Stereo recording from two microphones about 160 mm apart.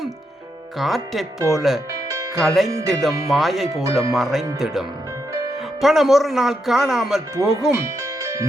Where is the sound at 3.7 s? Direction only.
20° right (ahead or behind).